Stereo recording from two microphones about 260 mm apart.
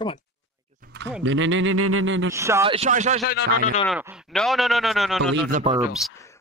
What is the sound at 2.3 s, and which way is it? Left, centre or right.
Speech, centre.